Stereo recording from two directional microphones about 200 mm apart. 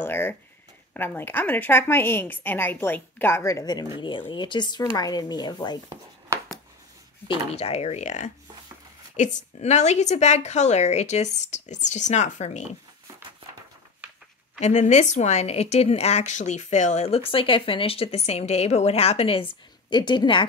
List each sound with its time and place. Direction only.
0.0 s a woman's voice: 10° left (ahead or behind)
6.3 s a sound: 15° right (ahead or behind)
7.2 s a woman's voice: 30° left (ahead or behind)
14.6 s a woman's voice: 35° left (ahead or behind)